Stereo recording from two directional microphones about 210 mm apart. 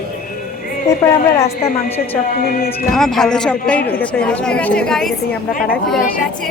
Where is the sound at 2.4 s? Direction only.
45° left (ahead or behind).